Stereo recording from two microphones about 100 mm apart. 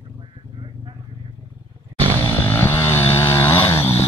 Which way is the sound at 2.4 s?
20° left (ahead or behind).